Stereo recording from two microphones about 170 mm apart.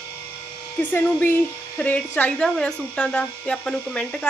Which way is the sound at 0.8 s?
10° left (ahead or behind).